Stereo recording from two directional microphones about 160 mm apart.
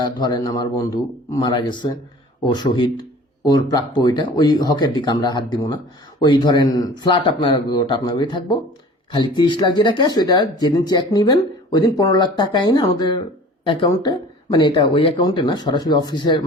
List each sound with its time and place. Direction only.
0.0 s speech: 25° left (ahead or behind)